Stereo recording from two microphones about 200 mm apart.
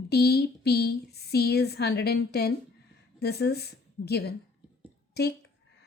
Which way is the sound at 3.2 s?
55° left (ahead or behind).